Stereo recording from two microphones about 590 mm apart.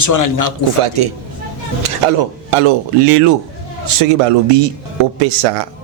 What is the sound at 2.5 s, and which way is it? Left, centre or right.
Speech, right.